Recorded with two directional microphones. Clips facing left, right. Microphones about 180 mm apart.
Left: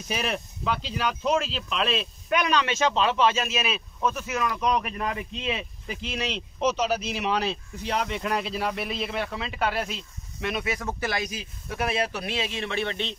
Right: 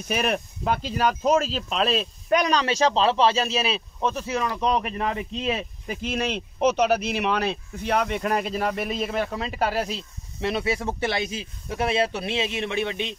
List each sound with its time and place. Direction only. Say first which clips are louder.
0.1 s speech: right 4 dB; 55° right (ahead or behind); by 13.1 s 15° right (ahead or behind)